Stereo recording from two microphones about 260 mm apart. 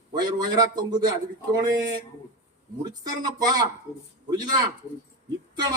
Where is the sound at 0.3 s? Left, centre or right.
Centre.